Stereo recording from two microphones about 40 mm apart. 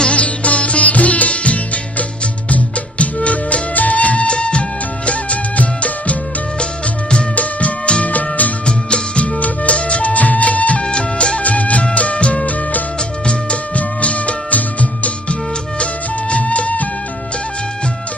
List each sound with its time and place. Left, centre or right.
0.0 s music: left
6.6 s music: left
8.6 s music: left
10.8 s music: left